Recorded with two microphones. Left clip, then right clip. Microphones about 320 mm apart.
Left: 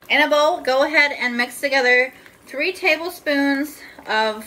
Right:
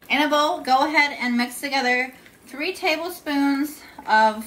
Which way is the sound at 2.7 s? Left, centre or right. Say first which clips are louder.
Left 2 dB; left.